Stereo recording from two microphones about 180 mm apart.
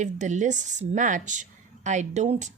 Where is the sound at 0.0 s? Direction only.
40° right (ahead or behind).